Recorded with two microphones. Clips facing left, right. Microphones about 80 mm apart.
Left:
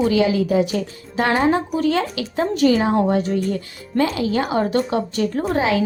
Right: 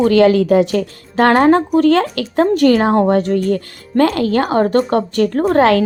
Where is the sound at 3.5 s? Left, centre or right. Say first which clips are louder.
Right 6 dB; right.